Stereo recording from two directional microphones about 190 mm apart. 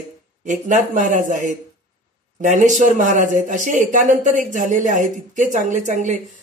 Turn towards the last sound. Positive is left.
turn(degrees=-40)  # may be behind; listen again after turning